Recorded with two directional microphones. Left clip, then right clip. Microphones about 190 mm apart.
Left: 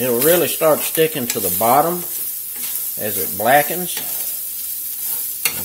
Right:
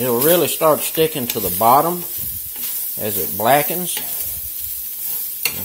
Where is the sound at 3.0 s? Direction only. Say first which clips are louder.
Even; 20° right (ahead or behind).